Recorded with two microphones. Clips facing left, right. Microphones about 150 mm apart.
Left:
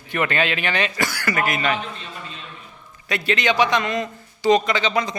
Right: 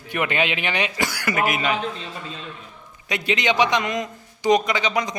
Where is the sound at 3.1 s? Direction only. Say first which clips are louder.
Left 1 dB; 20° right (ahead or behind).